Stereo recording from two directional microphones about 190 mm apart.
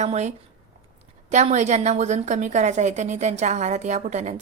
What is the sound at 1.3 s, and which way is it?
A woman's voice, 40° right (ahead or behind).